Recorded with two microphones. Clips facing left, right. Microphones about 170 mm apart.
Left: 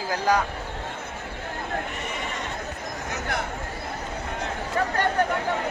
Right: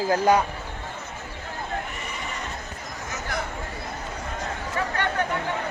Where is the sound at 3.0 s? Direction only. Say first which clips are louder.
Left 1 dB; 60° left (ahead or behind).